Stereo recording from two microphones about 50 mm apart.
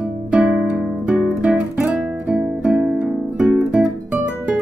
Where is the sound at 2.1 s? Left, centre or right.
Right.